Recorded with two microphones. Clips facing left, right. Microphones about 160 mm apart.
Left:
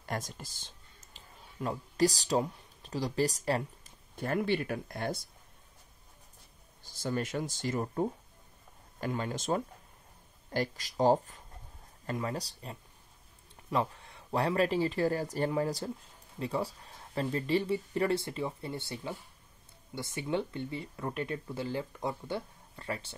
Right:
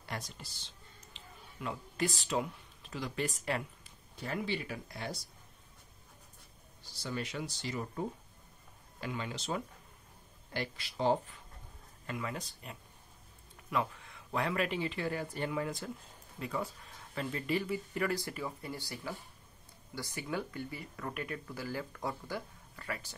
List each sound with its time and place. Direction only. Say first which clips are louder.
0.0 s speech: left 5 dB; 45° left (ahead or behind)
4.2 s speech: left 6 dB; 50° left (ahead or behind)
6.8 s speech: left 5 dB; 50° left (ahead or behind); by 23.1 s 25° left (ahead or behind)